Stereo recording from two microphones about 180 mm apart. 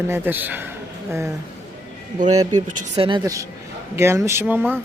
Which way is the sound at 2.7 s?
45° right (ahead or behind).